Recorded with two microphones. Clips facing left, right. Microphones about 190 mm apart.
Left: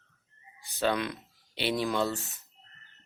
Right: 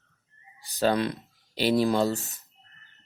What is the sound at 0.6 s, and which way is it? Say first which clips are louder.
Speech: right 5 dB; 35° right (ahead or behind).